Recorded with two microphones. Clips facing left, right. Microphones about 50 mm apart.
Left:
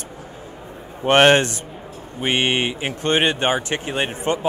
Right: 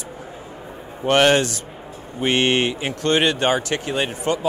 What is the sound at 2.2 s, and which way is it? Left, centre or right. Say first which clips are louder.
Speech: right 2 dB; centre.